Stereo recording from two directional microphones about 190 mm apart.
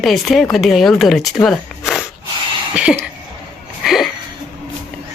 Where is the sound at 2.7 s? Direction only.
5° right (ahead or behind).